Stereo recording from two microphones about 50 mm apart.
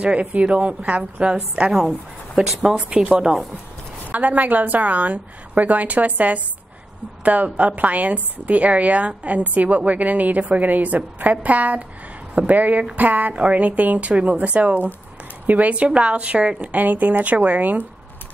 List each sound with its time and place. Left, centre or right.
0.0 s speech: right
1.7 s speech: centre
2.8 s a woman's voice: right